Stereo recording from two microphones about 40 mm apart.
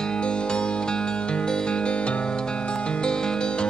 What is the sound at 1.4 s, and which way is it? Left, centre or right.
Music, left.